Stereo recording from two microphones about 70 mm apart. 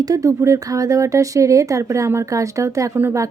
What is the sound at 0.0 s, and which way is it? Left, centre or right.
Speech, right.